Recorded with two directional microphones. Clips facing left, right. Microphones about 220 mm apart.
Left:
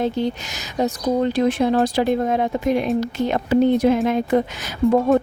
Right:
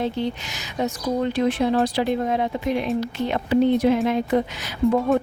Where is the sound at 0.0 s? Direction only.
45° left (ahead or behind).